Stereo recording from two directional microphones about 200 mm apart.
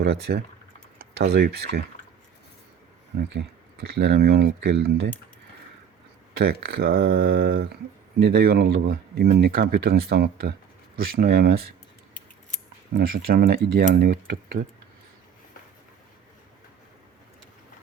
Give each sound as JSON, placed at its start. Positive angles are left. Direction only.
{"t": 0.0, "sound": "speech", "side_deg": -55}
{"t": 3.2, "sound": "speech", "side_deg": -55}
{"t": 6.3, "sound": "speech", "side_deg": -55}
{"t": 12.9, "sound": "speech", "side_deg": -50}